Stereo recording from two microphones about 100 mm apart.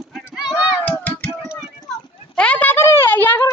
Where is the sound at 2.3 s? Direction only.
15° left (ahead or behind).